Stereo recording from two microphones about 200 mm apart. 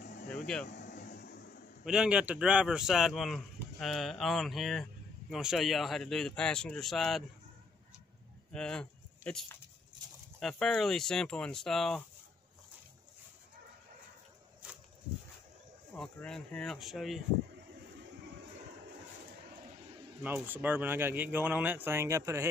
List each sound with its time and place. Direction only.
0.7 s a sound: 55° left (ahead or behind)
1.9 s speech: 5° right (ahead or behind)
8.5 s speech: 5° left (ahead or behind)
16.0 s speech: 5° left (ahead or behind)
20.2 s speech: 10° right (ahead or behind)